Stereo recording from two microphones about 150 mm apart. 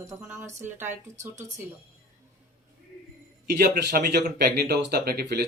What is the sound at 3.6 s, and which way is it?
Speech, 80° right.